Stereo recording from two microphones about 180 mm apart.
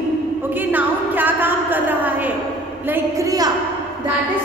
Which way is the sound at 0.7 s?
10° right (ahead or behind).